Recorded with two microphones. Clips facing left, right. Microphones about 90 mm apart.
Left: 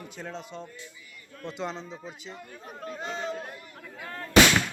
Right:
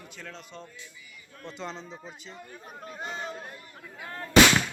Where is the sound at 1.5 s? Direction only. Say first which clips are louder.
Left 4 dB; 5° left (ahead or behind).